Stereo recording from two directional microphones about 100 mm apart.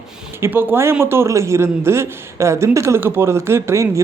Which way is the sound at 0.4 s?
25° right (ahead or behind).